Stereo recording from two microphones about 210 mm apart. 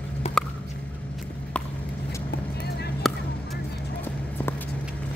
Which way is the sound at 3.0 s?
Centre (ahead or behind).